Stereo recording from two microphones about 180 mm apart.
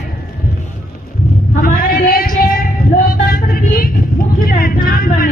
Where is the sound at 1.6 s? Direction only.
50° left (ahead or behind).